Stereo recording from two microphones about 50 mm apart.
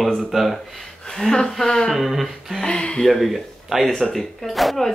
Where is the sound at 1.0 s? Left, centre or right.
Centre.